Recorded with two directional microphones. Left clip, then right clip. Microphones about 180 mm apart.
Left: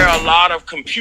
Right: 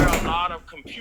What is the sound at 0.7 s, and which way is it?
Speech, 60° left (ahead or behind).